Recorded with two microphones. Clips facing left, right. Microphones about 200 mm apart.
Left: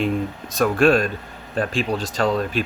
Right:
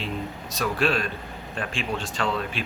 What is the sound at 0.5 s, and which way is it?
Speech, 50° left (ahead or behind).